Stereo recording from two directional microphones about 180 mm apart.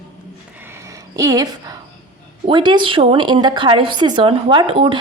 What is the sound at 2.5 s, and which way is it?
A woman's voice, 25° right (ahead or behind).